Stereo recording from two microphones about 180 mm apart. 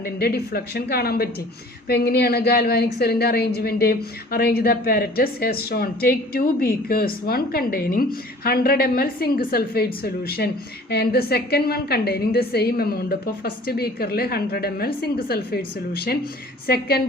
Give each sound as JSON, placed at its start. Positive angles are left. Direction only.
{"t": 0.0, "sound": "a woman's voice", "side_deg": 60}